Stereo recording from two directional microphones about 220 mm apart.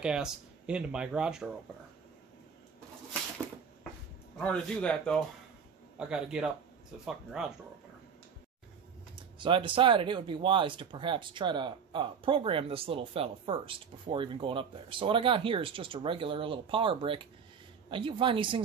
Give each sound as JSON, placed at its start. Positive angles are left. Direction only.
{"t": 0.0, "sound": "speech", "side_deg": -5}
{"t": 4.4, "sound": "speech", "side_deg": 5}
{"t": 9.1, "sound": "speech", "side_deg": -20}